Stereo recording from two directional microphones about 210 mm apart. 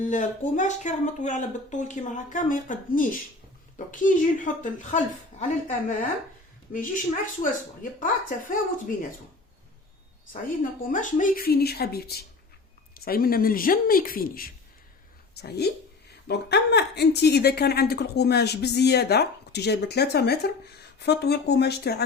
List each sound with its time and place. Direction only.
0.1 s speech: 35° left (ahead or behind)
7.8 s speech: 40° left (ahead or behind)
10.6 s a woman's voice: 40° left (ahead or behind)